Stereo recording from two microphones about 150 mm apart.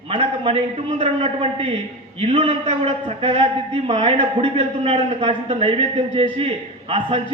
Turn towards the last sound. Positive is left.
turn(degrees=-40)  # may be behind; listen again after turning